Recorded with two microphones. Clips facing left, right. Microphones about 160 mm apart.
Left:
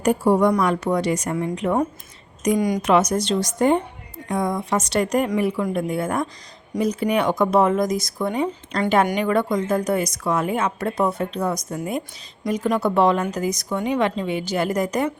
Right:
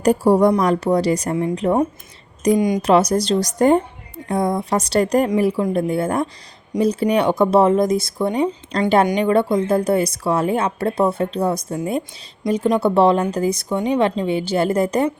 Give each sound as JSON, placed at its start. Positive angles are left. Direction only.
{"t": 0.0, "sound": "speech", "side_deg": -35}
{"t": 2.6, "sound": "speech", "side_deg": -20}
{"t": 2.8, "sound": "speech", "side_deg": -35}